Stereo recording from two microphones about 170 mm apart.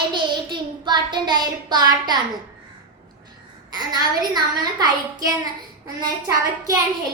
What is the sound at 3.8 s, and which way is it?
Child singing, 25° right (ahead or behind).